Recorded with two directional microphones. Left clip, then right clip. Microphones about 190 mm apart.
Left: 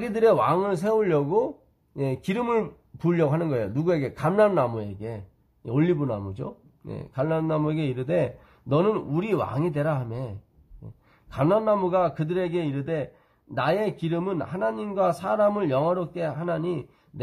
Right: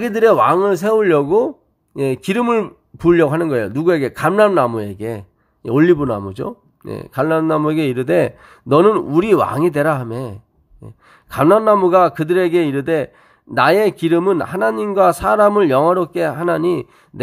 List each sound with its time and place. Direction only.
0.0 s speech: 30° right (ahead or behind)